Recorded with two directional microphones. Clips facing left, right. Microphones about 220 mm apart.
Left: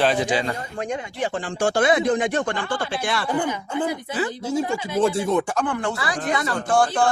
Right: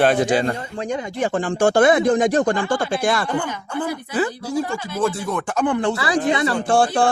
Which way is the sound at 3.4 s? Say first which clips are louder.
Left 1 dB; 15° left (ahead or behind).